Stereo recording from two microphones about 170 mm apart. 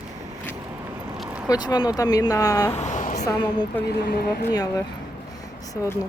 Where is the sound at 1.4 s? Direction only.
25° left (ahead or behind).